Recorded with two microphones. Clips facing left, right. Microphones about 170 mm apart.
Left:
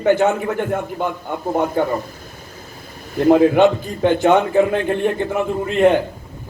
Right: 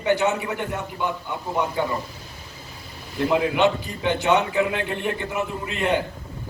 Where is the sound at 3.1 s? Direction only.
50° left (ahead or behind).